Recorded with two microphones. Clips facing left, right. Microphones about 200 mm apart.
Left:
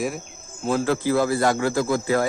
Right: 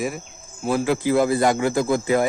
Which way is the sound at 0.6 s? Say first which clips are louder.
Right 1 dB; 10° right (ahead or behind).